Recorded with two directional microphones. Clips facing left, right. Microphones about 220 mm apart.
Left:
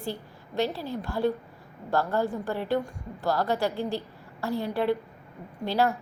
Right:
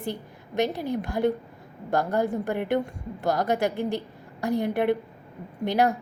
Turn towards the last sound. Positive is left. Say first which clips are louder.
# right 2 dB
turn(degrees=-15)  # may be behind; listen again after turning